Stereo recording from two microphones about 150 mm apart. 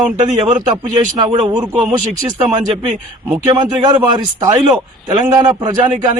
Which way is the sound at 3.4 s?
30° right (ahead or behind).